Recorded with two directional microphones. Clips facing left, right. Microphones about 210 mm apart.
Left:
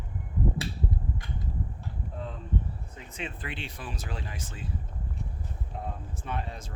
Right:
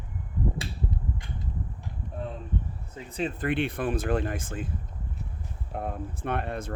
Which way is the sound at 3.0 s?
35° right (ahead or behind).